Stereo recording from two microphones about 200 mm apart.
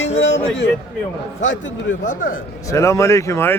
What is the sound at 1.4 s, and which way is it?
Speech, 70° left (ahead or behind).